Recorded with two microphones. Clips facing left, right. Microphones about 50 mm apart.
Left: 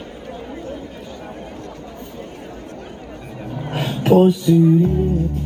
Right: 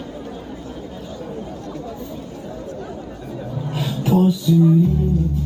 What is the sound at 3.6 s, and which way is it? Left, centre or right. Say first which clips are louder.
Music: left 5 dB; left.